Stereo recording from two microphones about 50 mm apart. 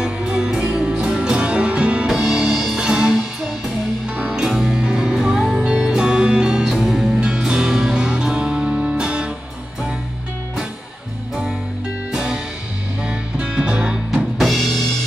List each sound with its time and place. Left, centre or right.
0.0 s music: centre
2.0 s music: centre
2.8 s music: centre
4.2 s music: centre
6.6 s music: centre
7.2 s music: centre
12.1 s music: centre
14.4 s drum kit: centre